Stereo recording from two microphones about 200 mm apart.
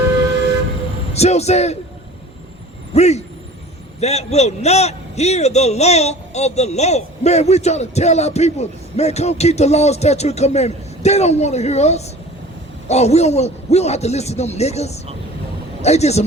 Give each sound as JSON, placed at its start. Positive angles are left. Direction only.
{"t": 1.1, "sound": "a man's voice", "side_deg": 35}
{"t": 2.9, "sound": "a man's voice", "side_deg": 35}